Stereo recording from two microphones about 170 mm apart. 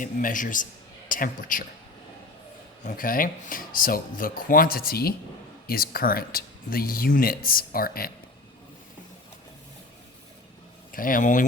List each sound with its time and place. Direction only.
0.0 s a man's voice: 50° left (ahead or behind)
2.8 s speech: 50° left (ahead or behind)
10.9 s speech: 55° left (ahead or behind)